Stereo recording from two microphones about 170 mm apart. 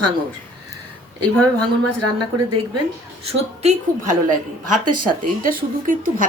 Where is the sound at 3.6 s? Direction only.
45° right (ahead or behind).